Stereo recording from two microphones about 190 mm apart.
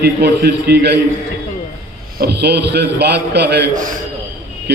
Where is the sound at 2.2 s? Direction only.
60° right (ahead or behind).